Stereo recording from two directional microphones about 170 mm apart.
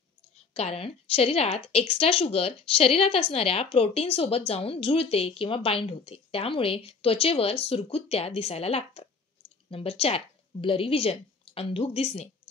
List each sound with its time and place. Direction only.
0.6 s a woman's voice: 35° left (ahead or behind)